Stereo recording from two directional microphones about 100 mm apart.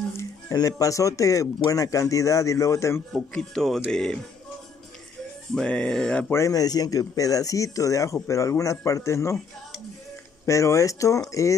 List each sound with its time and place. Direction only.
0.2 s speech: 35° left (ahead or behind)
3.1 s speech: 5° left (ahead or behind)
5.5 s speech: 10° left (ahead or behind)
6.3 s speech: 35° left (ahead or behind)
10.4 s speech: 30° left (ahead or behind)